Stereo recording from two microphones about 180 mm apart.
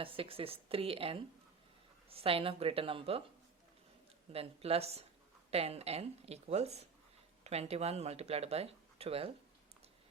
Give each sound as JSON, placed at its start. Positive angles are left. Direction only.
{"t": 0.0, "sound": "speech", "side_deg": -30}
{"t": 4.3, "sound": "speech", "side_deg": -35}